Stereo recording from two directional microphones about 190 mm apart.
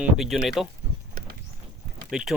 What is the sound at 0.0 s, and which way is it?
Speech, 5° right (ahead or behind).